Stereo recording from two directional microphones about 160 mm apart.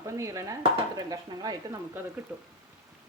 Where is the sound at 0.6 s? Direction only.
25° right (ahead or behind).